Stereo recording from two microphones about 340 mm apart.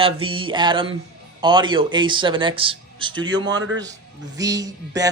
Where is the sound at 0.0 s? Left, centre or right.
Centre.